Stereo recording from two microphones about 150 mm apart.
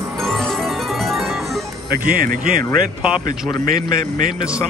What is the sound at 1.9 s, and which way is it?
Speech, 75° right (ahead or behind).